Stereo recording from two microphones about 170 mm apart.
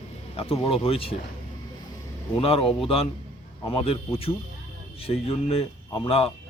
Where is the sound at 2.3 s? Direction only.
35° left (ahead or behind).